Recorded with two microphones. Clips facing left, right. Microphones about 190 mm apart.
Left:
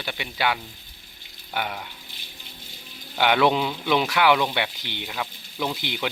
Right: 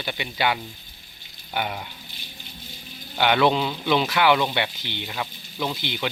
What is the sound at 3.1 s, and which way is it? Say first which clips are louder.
Speech: even; 5° left (ahead or behind).